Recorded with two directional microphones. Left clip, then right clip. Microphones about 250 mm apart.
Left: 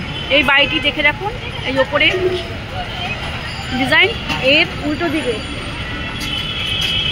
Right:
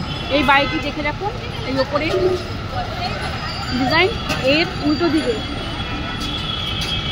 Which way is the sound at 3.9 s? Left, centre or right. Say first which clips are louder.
Left 4 dB; centre.